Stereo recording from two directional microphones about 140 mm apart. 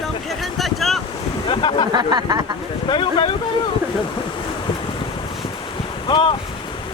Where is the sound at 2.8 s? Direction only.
35° left (ahead or behind).